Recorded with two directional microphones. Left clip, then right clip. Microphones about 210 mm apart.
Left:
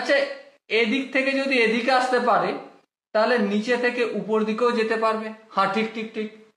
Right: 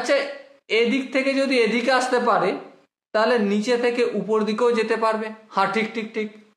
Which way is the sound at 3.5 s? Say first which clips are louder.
Right 2 dB; 35° right (ahead or behind).